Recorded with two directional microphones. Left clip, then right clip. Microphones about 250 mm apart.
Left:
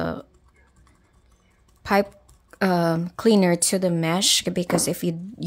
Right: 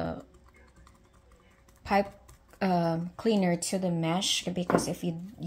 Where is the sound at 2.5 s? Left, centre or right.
Left.